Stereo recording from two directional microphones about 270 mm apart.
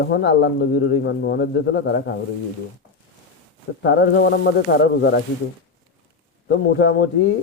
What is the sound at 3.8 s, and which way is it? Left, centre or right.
Speech, left.